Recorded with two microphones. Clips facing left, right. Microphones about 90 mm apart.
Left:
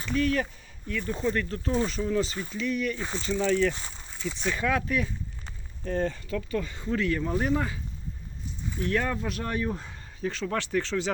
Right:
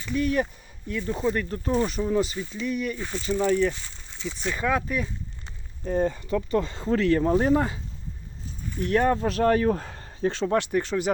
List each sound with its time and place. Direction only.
0.2 s speech: 15° right (ahead or behind)
2.6 s speech: 5° right (ahead or behind)
3.0 s speech: 30° left (ahead or behind)
3.2 s speech: 15° right (ahead or behind)
4.2 s speech: centre (ahead or behind); by 6.4 s 20° right (ahead or behind)
6.5 s speech: 30° right (ahead or behind)
9.0 s speech: 40° right (ahead or behind)
9.4 s speech: 65° right (ahead or behind)
10.2 s speech: 35° right (ahead or behind)
10.6 s speech: 15° right (ahead or behind)